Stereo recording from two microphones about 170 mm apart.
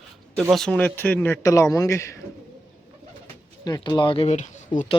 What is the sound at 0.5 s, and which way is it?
Speech, 5° left (ahead or behind).